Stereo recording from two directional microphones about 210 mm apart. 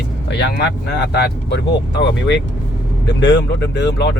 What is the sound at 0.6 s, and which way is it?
Speech, 55° left (ahead or behind).